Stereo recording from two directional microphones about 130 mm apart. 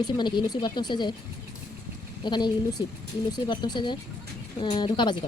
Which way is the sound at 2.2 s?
35° left (ahead or behind).